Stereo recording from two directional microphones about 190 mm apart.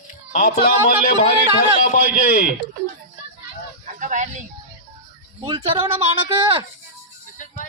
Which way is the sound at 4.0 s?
40° right (ahead or behind).